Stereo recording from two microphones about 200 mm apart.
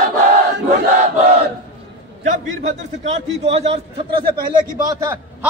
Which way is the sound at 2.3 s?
35° right (ahead or behind).